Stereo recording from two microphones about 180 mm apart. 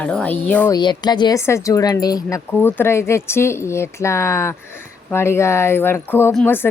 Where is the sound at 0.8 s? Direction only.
25° left (ahead or behind).